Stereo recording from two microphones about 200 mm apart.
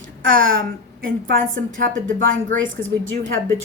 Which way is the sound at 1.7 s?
45° right (ahead or behind).